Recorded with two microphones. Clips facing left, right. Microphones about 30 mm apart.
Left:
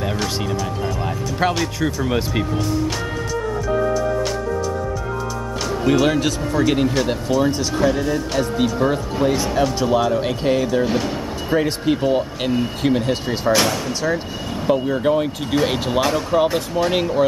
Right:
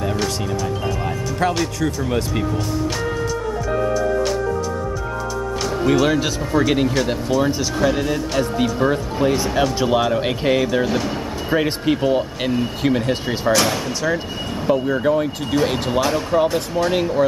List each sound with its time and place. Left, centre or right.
0.0 s music: centre
1.4 s speech: left
5.9 s speech: centre
9.8 s speech: centre
10.9 s speech: centre
11.5 s speech: centre
11.9 s speech: centre
14.7 s speech: centre